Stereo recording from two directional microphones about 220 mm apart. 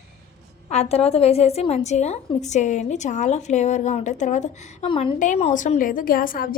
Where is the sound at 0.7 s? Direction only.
30° left (ahead or behind).